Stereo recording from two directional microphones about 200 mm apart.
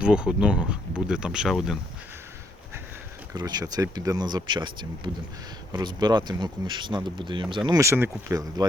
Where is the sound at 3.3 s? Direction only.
20° right (ahead or behind).